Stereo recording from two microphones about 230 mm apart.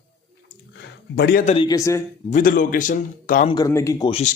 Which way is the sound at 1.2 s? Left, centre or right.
Left.